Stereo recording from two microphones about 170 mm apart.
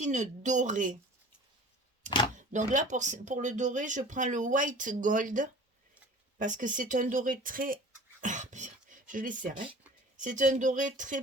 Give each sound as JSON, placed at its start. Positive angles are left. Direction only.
{"t": 0.0, "sound": "speech", "side_deg": -45}
{"t": 2.0, "sound": "speech", "side_deg": 25}
{"t": 2.3, "sound": "speech", "side_deg": -45}